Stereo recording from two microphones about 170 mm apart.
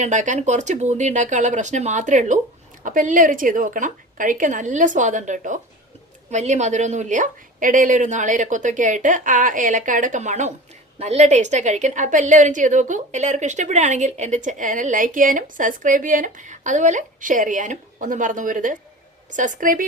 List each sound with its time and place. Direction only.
0.0 s a woman's voice: 45° right (ahead or behind)